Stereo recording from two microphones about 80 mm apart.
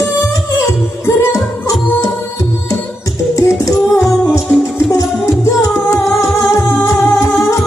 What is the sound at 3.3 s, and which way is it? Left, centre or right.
Music, left.